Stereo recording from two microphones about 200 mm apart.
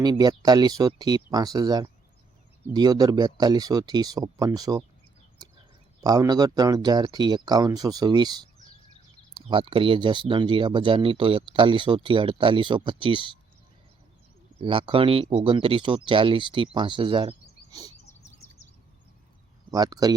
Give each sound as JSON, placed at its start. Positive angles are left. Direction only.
{"t": 0.0, "sound": "speech", "side_deg": -20}
{"t": 6.0, "sound": "speech", "side_deg": -20}
{"t": 14.6, "sound": "speech", "side_deg": -25}
{"t": 19.7, "sound": "speech", "side_deg": -20}